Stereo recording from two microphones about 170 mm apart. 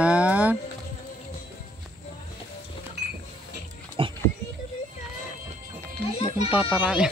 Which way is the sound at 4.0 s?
30° right (ahead or behind).